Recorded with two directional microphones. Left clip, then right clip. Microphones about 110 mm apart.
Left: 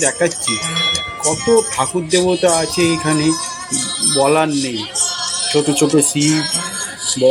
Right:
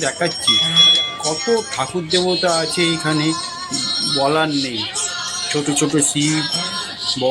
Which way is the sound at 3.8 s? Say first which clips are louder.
Even; 60° left (ahead or behind).